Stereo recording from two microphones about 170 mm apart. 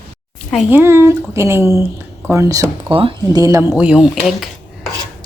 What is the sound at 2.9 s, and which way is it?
Speech, 30° right (ahead or behind).